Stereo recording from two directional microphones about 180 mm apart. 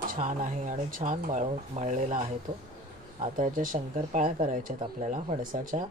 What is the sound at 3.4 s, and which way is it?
Speech, 45° right (ahead or behind).